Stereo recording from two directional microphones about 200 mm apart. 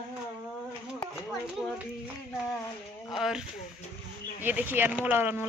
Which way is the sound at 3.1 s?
5° right (ahead or behind).